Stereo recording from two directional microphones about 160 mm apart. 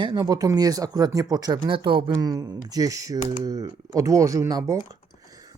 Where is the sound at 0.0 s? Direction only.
25° right (ahead or behind).